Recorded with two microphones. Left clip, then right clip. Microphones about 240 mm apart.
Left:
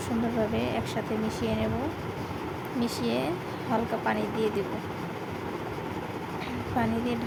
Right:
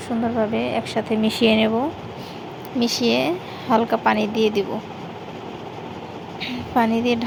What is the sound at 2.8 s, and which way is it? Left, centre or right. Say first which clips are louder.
A woman's voice: right 10 dB; right.